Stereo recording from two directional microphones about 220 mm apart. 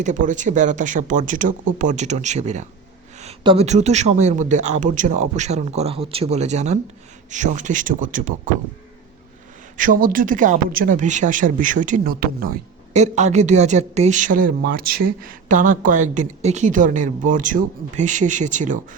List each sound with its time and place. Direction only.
0.0 s speech: 35° right (ahead or behind)
9.7 s speech: 40° right (ahead or behind)